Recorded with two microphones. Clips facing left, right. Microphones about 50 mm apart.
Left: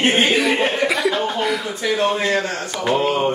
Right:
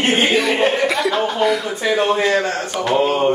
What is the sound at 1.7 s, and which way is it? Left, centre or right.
Speech, right.